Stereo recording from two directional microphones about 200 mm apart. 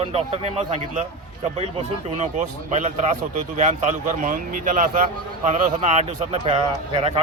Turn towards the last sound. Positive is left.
turn(degrees=-30)  # may be behind; listen again after turning